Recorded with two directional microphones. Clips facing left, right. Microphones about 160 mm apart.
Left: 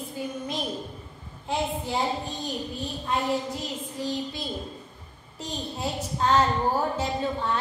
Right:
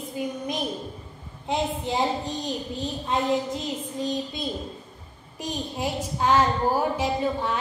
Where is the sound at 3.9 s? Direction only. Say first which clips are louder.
Right 1 dB; 20° right (ahead or behind).